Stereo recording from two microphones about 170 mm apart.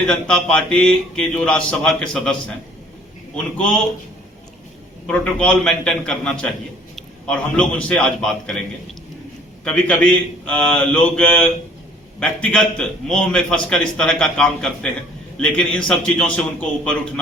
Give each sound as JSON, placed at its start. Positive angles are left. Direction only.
{"t": 0.1, "sound": "a man's voice", "side_deg": 5}
{"t": 5.0, "sound": "a man's voice", "side_deg": 5}